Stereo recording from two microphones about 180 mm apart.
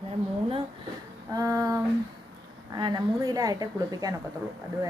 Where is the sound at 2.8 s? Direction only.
25° right (ahead or behind).